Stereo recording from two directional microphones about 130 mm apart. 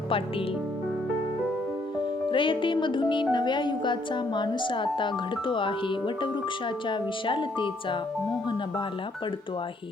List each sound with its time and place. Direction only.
2.3 s speech: 40° left (ahead or behind)